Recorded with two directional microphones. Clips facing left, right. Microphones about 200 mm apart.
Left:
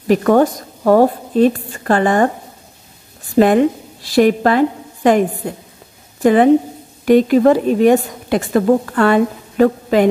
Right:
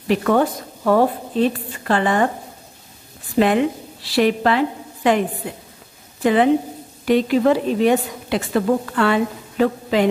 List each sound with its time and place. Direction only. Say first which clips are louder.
0.1 s a woman's voice: left 5 dB; 45° left (ahead or behind)
3.3 s a woman's voice: left 5 dB; 45° left (ahead or behind)